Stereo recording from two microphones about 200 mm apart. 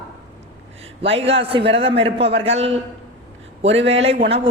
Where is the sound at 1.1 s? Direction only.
30° right (ahead or behind).